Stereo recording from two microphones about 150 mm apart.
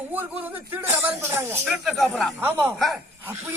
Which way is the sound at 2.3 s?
15° right (ahead or behind).